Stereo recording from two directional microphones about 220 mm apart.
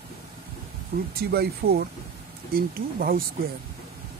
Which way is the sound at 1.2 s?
45° right (ahead or behind).